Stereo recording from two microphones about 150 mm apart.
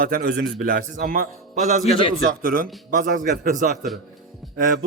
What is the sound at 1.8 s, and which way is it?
Speech, 35° left (ahead or behind).